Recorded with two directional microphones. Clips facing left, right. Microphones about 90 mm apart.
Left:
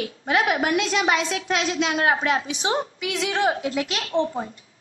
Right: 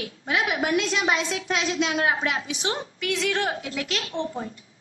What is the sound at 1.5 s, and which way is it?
Speech, 55° left (ahead or behind).